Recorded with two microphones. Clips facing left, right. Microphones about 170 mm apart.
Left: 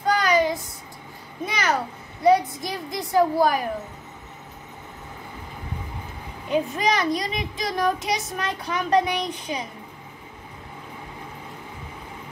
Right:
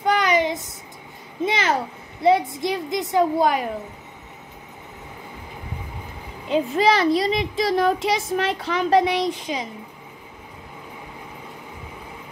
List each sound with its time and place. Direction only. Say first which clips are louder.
0.0 s child singing: right 1 dB; 25° right (ahead or behind)
1.4 s a child's voice: right 3 dB; 25° right (ahead or behind)
6.5 s a woman's voice: right 4 dB; 30° right (ahead or behind)